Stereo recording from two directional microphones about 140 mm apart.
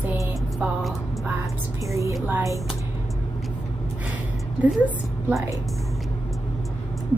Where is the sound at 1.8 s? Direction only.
25° right (ahead or behind).